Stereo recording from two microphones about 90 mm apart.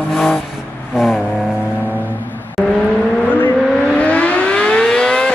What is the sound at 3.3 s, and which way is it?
Civil defense siren, 20° left (ahead or behind).